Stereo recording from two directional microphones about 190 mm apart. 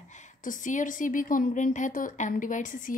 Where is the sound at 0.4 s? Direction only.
45° left (ahead or behind).